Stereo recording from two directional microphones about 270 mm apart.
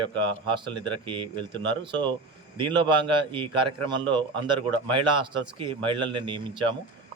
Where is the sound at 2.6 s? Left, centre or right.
Centre.